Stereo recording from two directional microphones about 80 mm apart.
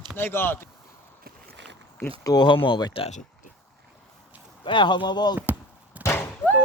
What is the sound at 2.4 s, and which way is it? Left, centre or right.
Speech, left.